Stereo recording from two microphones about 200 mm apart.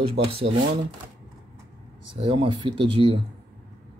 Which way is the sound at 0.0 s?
30° right (ahead or behind).